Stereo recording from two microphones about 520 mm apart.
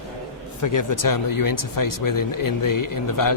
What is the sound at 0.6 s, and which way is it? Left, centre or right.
Speech, left.